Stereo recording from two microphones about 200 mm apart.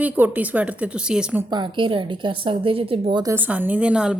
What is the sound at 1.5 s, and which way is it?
A woman's voice, 25° right (ahead or behind).